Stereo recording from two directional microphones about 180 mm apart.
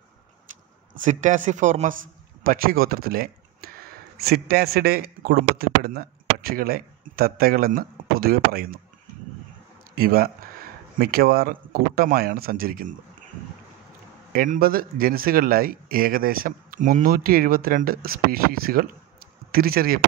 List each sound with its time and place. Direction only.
1.0 s speech: 45° right (ahead or behind)
9.9 s speech: 55° right (ahead or behind)
14.3 s speech: 50° right (ahead or behind)